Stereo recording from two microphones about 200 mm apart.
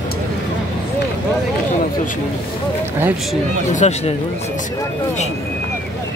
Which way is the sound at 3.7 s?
35° left (ahead or behind).